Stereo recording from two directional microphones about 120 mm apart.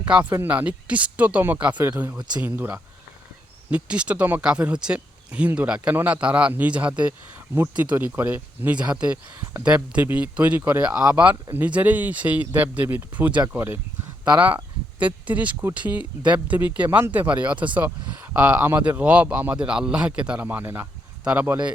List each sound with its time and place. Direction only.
0.1 s speech: 5° right (ahead or behind)